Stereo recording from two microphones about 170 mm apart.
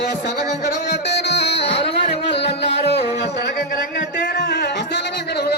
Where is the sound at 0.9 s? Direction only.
80° left.